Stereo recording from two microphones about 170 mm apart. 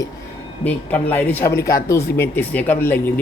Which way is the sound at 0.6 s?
10° left (ahead or behind).